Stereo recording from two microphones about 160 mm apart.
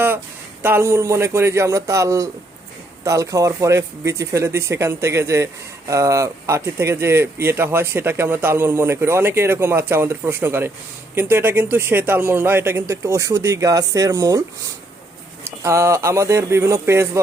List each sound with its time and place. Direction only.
0.6 s speech: 15° right (ahead or behind)
15.4 s speech: 20° right (ahead or behind)